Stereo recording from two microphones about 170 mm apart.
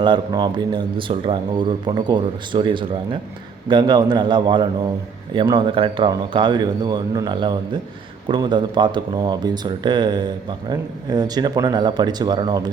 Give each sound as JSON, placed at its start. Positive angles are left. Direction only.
{"t": 0.0, "sound": "a man's voice", "side_deg": -25}